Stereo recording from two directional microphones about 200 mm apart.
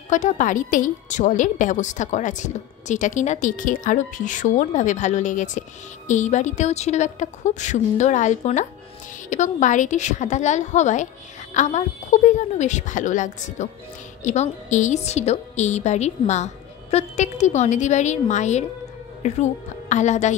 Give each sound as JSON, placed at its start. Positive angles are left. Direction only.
{"t": 0.1, "sound": "a woman's voice", "side_deg": 40}